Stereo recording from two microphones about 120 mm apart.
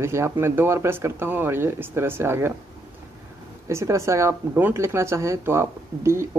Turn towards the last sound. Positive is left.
turn(degrees=-25)  # may be behind; listen again after turning